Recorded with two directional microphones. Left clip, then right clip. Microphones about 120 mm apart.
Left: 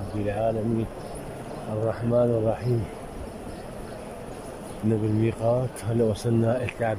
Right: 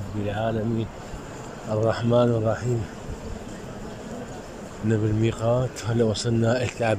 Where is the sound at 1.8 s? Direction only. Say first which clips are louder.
Right 2 dB; 10° left (ahead or behind).